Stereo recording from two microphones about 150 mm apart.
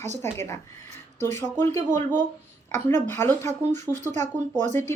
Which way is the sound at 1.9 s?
55° right (ahead or behind).